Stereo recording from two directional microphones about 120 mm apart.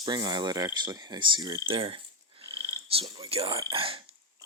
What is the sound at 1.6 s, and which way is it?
Speech, 50° right (ahead or behind).